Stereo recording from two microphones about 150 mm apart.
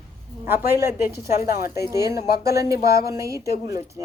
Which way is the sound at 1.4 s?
80° left.